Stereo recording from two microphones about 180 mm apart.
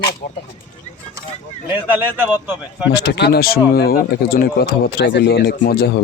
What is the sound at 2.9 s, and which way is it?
Speech, 65° left (ahead or behind).